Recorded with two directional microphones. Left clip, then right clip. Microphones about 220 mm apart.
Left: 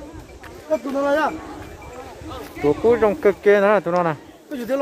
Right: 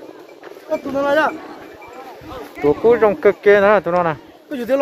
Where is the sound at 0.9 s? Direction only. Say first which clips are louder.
Right 5 dB; 15° right (ahead or behind).